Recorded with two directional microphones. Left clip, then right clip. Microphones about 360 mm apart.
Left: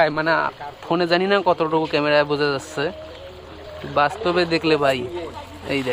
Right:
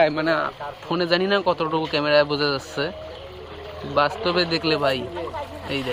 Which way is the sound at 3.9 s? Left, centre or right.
Centre.